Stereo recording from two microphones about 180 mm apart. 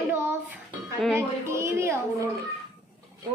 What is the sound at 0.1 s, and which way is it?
Music, 10° right (ahead or behind).